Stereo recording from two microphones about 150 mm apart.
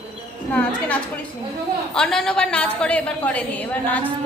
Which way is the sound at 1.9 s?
5° left (ahead or behind).